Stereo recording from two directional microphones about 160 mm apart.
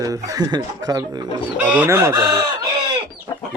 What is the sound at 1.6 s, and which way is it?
Speech, 10° right (ahead or behind).